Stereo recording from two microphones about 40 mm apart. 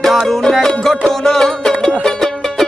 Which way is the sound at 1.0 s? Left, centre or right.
Centre.